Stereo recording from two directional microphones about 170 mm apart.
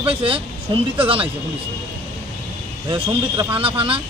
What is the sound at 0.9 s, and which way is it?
Speech, 30° right (ahead or behind).